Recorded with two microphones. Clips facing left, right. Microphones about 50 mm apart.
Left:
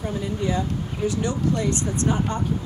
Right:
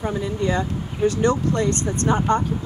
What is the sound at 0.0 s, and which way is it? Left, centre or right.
Speech, right.